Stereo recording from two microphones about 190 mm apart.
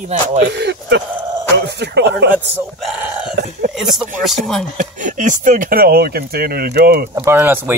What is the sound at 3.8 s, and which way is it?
Speech, centre (ahead or behind).